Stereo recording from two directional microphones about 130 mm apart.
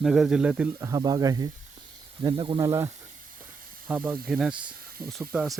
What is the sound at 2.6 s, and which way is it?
Speech, 20° right (ahead or behind).